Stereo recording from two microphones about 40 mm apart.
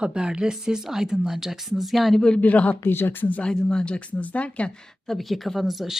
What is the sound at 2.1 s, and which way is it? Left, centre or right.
Speech, centre.